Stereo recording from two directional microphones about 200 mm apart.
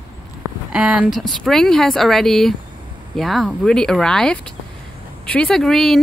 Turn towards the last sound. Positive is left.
turn(degrees=0)  # may be behind; listen again after turning